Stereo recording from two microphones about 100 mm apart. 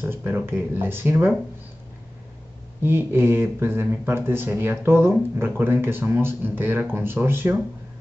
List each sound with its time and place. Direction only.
0.0 s speech: 20° right (ahead or behind)
2.8 s speech: 25° right (ahead or behind)